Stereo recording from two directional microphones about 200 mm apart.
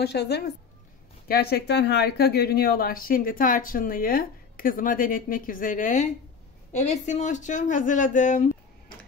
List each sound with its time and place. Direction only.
0.0 s a woman's voice: 55° left (ahead or behind); by 8.5 s 40° left (ahead or behind)